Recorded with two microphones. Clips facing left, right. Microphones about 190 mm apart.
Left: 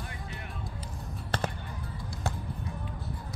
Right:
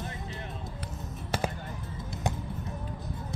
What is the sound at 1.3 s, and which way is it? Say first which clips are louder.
Basketball bounce: right 1 dB; 10° right (ahead or behind).